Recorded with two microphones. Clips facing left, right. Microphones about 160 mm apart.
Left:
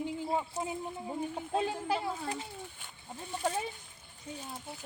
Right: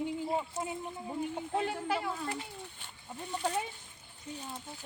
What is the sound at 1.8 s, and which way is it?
Speech, 30° left (ahead or behind).